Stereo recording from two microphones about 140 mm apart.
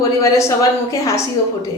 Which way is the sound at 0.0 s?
20° left (ahead or behind).